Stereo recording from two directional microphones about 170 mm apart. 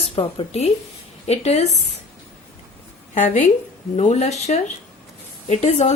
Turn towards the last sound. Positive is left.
turn(degrees=40)  # may be behind; listen again after turning